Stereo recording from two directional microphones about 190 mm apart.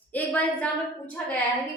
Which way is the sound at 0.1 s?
10° left (ahead or behind).